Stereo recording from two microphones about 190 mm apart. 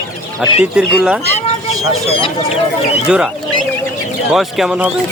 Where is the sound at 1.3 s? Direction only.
35° left (ahead or behind).